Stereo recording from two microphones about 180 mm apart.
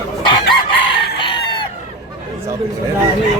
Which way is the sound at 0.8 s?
25° left (ahead or behind).